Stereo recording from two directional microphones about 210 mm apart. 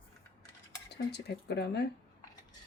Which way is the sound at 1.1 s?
50° left (ahead or behind).